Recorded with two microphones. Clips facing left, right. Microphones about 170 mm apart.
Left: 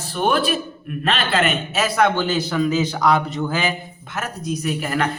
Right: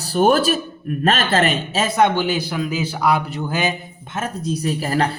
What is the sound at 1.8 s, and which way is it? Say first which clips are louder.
A man's voice: right 1 dB; 20° right (ahead or behind).